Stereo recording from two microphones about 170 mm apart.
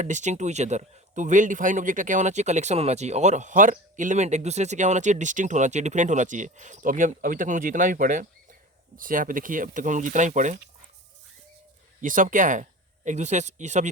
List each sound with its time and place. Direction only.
0.0 s speech: 45° right (ahead or behind)
12.0 s speech: 50° right (ahead or behind)